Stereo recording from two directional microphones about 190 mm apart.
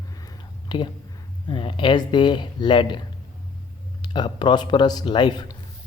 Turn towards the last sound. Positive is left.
turn(degrees=25)  # may be behind; listen again after turning